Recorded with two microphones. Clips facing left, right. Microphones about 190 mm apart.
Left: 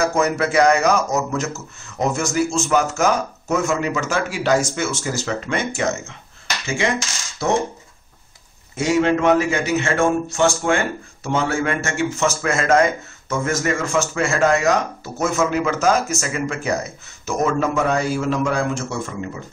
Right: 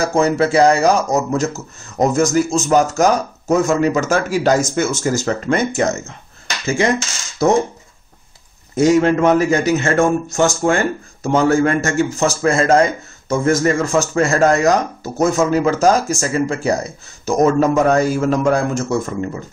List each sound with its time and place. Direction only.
0.0 s a man's voice: 30° right (ahead or behind)
7.4 s a man's voice: 40° right (ahead or behind)
8.7 s a man's voice: 40° right (ahead or behind)